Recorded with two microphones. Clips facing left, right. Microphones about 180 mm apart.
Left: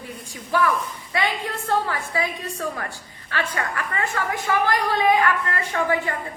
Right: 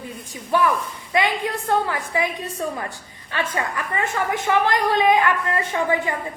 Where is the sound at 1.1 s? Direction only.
15° right (ahead or behind).